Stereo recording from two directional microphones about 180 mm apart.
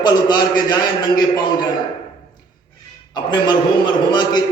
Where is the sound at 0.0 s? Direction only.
25° left (ahead or behind).